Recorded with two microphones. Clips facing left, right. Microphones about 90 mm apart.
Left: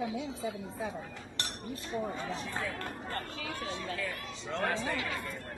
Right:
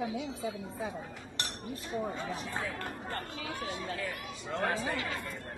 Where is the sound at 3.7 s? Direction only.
25° right (ahead or behind).